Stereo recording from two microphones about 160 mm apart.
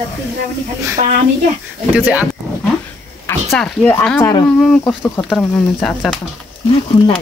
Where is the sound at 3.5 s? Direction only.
5° left (ahead or behind).